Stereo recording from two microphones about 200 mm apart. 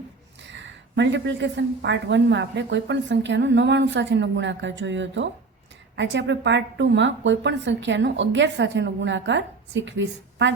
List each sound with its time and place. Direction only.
0.4 s a woman's voice: 65° right (ahead or behind)